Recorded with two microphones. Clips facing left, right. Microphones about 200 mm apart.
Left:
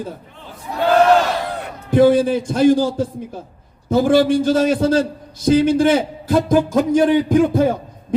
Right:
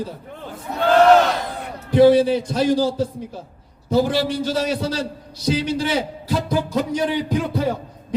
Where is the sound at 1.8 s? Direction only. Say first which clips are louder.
Even; 50° left (ahead or behind).